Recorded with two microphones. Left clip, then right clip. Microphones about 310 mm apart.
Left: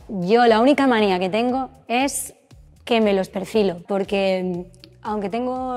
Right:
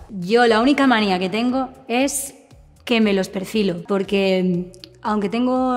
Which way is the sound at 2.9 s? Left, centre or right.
Right.